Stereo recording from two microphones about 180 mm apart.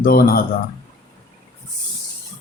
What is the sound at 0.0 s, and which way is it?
Speech, 55° left (ahead or behind).